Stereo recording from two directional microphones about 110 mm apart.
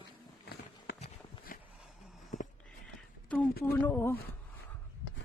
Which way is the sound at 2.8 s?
15° left (ahead or behind).